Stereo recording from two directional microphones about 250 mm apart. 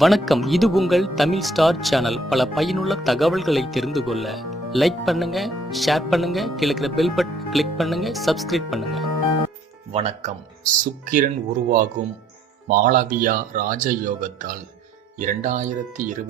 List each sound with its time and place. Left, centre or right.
0.0 s speech: centre
9.9 s speech: right
12.6 s speech: right